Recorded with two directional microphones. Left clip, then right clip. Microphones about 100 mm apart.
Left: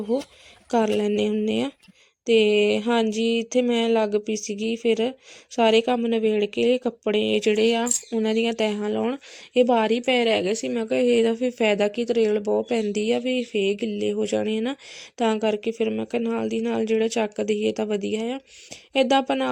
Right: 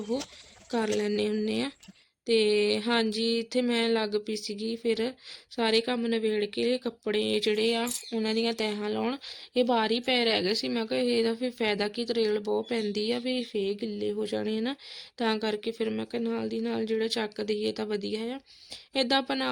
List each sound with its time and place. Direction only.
0.7 s speech: 35° left (ahead or behind)
9.0 s speech: 25° left (ahead or behind)
16.4 s speech: 35° left (ahead or behind)